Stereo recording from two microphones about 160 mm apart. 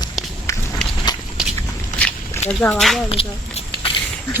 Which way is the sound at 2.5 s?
5° left (ahead or behind).